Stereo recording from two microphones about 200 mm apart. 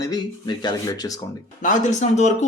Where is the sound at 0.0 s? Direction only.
20° left (ahead or behind).